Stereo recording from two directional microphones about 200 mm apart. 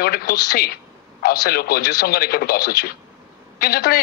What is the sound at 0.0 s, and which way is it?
A woman's voice, 50° left (ahead or behind).